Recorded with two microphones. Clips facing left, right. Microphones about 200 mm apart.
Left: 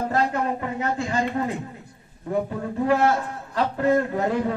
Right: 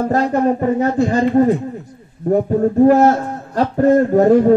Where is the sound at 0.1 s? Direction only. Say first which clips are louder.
Right 9 dB; 40° right (ahead or behind).